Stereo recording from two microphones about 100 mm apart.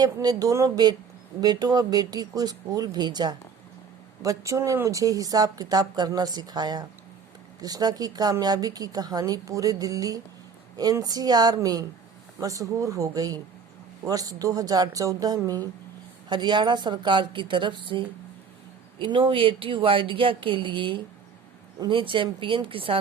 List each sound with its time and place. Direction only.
0.0 s a woman's voice: 40° right (ahead or behind)
4.2 s a woman's voice: 35° right (ahead or behind); by 23.0 s 65° right (ahead or behind)